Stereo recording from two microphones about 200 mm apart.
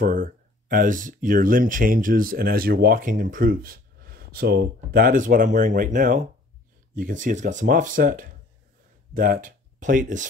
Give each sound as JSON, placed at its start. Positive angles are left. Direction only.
{"t": 0.0, "sound": "speech", "side_deg": -45}